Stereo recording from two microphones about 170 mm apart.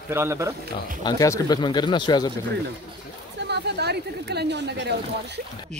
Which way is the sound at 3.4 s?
75° right (ahead or behind).